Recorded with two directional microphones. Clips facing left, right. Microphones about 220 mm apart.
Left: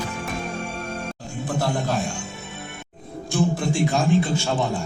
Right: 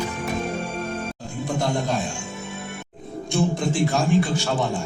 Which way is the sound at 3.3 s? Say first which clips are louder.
Even; centre (ahead or behind).